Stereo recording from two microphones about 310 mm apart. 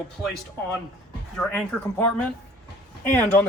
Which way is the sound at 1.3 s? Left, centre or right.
Centre.